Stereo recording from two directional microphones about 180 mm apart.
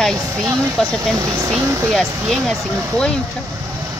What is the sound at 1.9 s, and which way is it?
Speech, centre (ahead or behind).